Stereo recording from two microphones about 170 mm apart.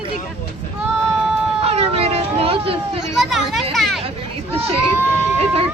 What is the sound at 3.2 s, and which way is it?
Speech, centre (ahead or behind).